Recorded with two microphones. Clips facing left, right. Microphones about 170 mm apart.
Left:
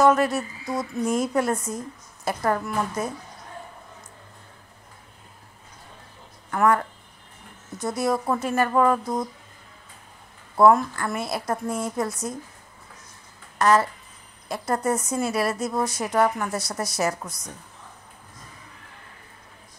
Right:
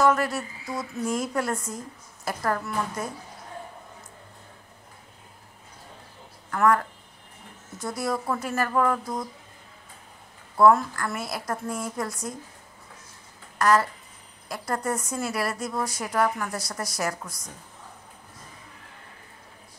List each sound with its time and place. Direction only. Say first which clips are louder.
0.0 s a woman's voice: left 4 dB; 20° left (ahead or behind)
6.5 s a woman's voice: left 1 dB; 20° left (ahead or behind)
10.5 s a woman's voice: left 2 dB; 25° left (ahead or behind)
13.6 s a woman's voice: left 2 dB; 25° left (ahead or behind)